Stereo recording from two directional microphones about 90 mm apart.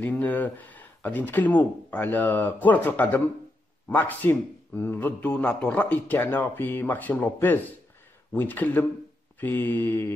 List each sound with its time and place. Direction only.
0.0 s a man's voice: 20° left (ahead or behind)